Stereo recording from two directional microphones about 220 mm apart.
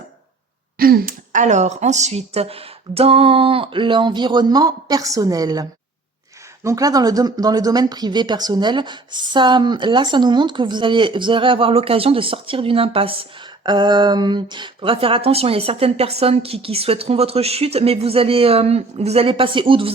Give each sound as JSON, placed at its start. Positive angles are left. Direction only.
{"t": 0.8, "sound": "speech", "side_deg": -40}